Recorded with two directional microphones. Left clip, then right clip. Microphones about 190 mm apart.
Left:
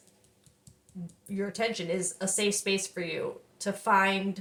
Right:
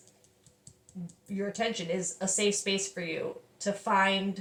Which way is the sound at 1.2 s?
30° left (ahead or behind).